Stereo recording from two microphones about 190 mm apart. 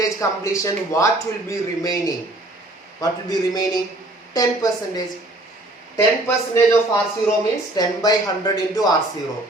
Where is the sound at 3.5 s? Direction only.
20° left (ahead or behind).